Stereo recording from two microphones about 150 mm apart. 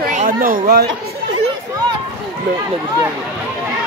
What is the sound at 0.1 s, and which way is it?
Speech, 60° right (ahead or behind).